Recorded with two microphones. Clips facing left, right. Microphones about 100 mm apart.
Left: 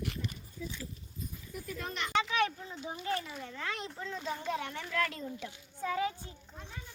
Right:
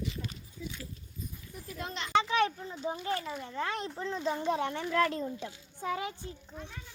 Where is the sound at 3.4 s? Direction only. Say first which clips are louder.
Right 5 dB; 30° right (ahead or behind).